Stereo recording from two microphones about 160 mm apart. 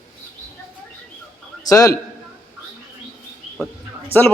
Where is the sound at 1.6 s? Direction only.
20° left (ahead or behind).